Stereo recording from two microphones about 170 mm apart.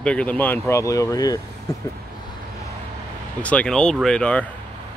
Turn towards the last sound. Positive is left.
turn(degrees=5)  # may be behind; listen again after turning